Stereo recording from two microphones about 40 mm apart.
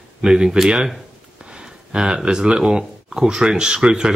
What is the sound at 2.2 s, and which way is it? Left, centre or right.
Speech, right.